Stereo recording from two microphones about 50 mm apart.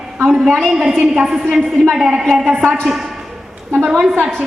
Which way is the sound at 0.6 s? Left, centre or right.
Centre.